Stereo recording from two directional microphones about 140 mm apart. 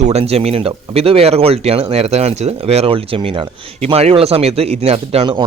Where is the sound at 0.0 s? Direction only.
50° right (ahead or behind).